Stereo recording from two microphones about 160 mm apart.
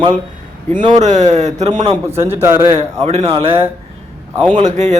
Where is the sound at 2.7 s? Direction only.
40° right (ahead or behind).